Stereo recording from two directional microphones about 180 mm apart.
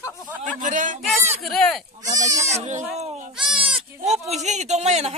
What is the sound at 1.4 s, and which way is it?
Speech, centre (ahead or behind).